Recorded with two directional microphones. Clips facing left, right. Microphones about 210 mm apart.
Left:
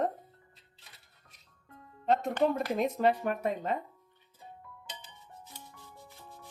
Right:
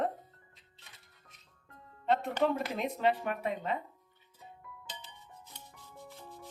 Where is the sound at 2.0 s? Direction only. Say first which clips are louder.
Left 2 dB; 40° left (ahead or behind).